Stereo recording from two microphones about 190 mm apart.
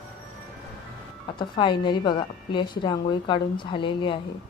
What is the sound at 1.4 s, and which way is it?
A woman's voice, 25° left (ahead or behind).